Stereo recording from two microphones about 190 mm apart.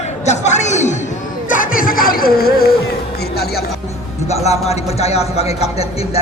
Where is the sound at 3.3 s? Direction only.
55° left (ahead or behind).